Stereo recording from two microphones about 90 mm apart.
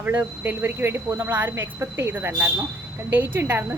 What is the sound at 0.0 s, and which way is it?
Speech, 20° right (ahead or behind).